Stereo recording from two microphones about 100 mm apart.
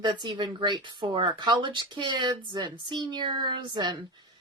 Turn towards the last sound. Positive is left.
turn(degrees=-50)  # may be behind; listen again after turning